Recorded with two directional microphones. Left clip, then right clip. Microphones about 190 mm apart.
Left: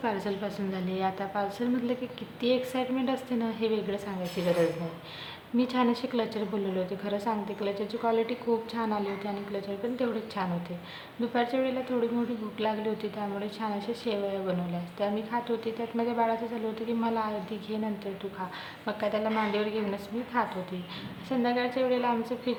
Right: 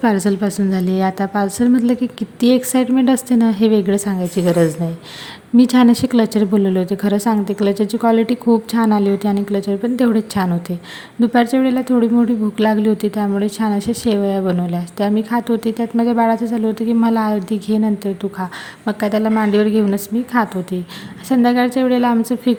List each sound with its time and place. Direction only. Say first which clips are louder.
0.0 s a woman's voice: right 14 dB; 45° right (ahead or behind)
5.5 s a woman's voice: right 14 dB; 50° right (ahead or behind)